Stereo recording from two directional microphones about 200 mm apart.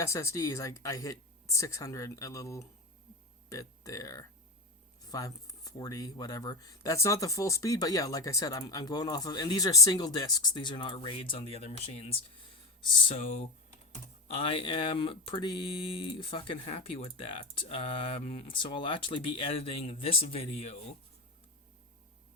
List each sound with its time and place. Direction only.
0.0 s speech: 15° left (ahead or behind); by 20.7 s 30° left (ahead or behind)